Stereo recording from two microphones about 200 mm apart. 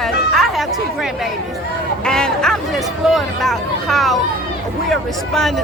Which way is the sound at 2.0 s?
5° left (ahead or behind).